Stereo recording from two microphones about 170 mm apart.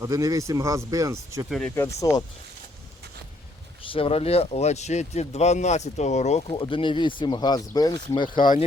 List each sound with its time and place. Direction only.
0.0 s speech: 20° right (ahead or behind)
1.5 s speech: centre (ahead or behind)
1.7 s speech: 15° left (ahead or behind)
3.9 s speech: 35° left (ahead or behind)
6.6 s speech: 30° left (ahead or behind)